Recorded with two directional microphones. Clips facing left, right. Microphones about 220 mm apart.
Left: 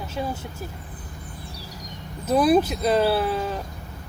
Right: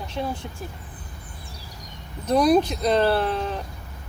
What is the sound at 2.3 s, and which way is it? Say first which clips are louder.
Speech: even; 5° left (ahead or behind).